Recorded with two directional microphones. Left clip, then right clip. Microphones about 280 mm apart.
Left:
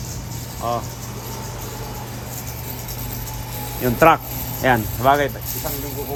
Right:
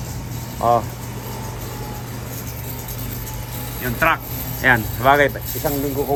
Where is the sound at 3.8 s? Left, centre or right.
Left.